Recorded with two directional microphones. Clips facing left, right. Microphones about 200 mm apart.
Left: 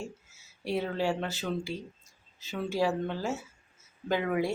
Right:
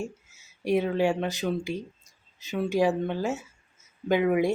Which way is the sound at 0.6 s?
15° right (ahead or behind).